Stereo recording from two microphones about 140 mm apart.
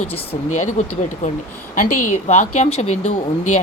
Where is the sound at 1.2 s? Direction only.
65° left (ahead or behind).